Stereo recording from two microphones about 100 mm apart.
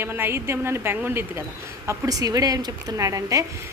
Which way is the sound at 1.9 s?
40° right (ahead or behind).